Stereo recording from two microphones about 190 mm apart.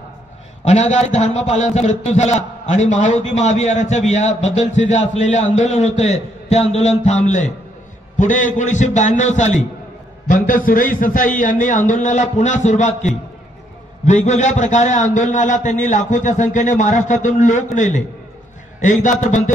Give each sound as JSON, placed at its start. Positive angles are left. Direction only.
{"t": 0.7, "sound": "a man's voice", "side_deg": 35}